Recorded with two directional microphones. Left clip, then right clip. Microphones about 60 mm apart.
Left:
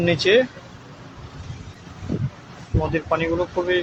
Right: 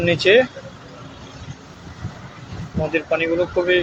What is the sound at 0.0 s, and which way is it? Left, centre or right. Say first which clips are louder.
Speech: right 3 dB; left.